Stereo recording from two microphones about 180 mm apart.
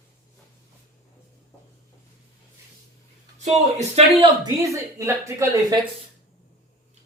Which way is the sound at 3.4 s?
40° right (ahead or behind).